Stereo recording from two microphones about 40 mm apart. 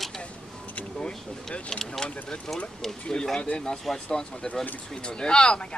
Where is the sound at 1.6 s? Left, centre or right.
Centre.